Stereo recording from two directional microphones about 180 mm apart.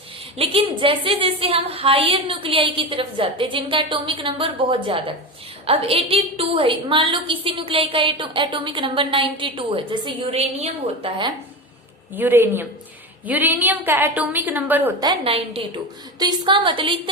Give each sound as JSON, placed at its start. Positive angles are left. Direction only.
{"t": 0.3, "sound": "a woman's voice", "side_deg": -30}
{"t": 12.1, "sound": "a woman's voice", "side_deg": -10}
{"t": 15.0, "sound": "a woman's voice", "side_deg": -30}